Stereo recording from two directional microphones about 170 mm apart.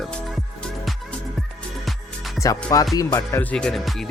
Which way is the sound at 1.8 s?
Centre (ahead or behind).